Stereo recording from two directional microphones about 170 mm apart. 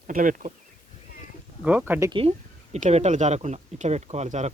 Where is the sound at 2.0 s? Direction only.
30° right (ahead or behind).